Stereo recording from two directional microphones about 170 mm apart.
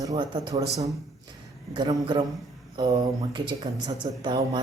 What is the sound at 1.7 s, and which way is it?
Speech, 25° right (ahead or behind).